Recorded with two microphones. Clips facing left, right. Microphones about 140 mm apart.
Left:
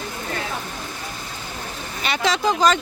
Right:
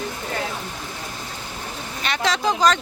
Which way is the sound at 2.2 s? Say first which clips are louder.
Left 1 dB; centre (ahead or behind).